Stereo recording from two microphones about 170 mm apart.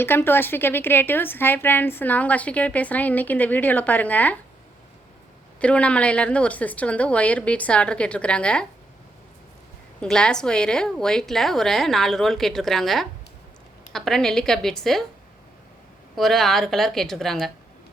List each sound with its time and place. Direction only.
0.0 s a woman's voice: 15° left (ahead or behind)
5.5 s a woman's voice: 5° left (ahead or behind)
10.0 s a woman's voice: 5° left (ahead or behind)
16.1 s a woman's voice: centre (ahead or behind)